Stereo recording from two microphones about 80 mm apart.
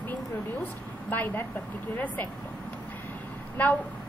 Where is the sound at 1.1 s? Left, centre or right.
Left.